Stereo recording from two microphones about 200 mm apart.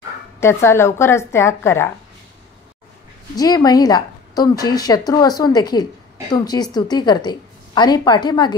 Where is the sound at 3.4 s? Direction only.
20° left (ahead or behind).